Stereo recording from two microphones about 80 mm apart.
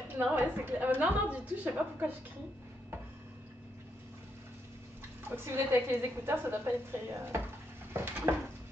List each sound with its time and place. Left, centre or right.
0.2 s a woman's voice: right
5.3 s a woman's voice: right